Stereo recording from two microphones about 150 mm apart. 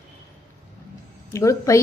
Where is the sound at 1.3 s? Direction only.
20° left (ahead or behind).